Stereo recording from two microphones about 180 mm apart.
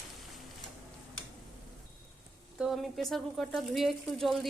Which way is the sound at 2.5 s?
Centre (ahead or behind).